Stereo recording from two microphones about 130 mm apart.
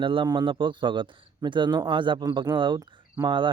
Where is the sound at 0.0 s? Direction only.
40° right (ahead or behind).